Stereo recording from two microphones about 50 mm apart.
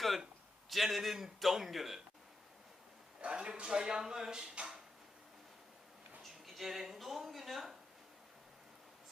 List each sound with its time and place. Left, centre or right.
0.7 s a man's voice: centre
3.2 s speech: right
6.2 s speech: centre